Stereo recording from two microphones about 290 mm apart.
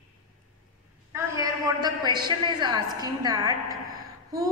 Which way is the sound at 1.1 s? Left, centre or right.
Centre.